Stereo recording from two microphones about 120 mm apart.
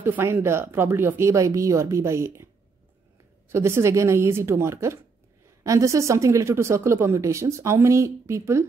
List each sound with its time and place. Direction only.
0.0 s speech: 20° right (ahead or behind)